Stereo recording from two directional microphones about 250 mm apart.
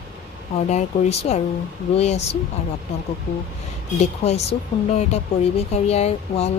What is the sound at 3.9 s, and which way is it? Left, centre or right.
Speech, left.